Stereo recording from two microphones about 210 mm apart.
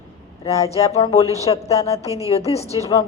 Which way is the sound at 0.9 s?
25° left (ahead or behind).